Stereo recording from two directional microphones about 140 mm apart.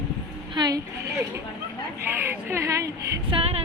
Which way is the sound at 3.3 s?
45° right (ahead or behind).